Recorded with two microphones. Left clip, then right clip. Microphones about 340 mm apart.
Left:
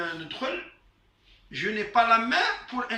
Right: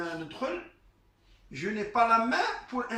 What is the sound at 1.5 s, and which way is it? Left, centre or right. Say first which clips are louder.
Speech: left 5 dB; centre.